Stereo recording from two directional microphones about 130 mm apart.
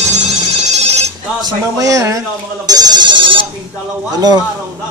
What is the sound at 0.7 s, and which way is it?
Ringtone, 55° right (ahead or behind).